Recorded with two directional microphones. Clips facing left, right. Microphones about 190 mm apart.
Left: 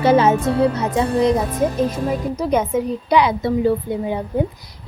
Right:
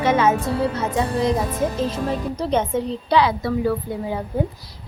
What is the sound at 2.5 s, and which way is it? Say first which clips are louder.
A woman's voice: left 2 dB; 10° left (ahead or behind).